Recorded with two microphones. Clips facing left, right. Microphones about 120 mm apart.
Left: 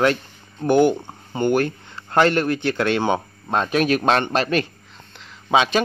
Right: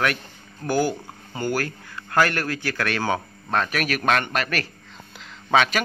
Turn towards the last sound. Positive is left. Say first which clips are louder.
# left 2 dB
turn(degrees=20)  # may be behind; listen again after turning